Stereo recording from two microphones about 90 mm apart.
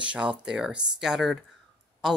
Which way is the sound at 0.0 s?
10° right (ahead or behind).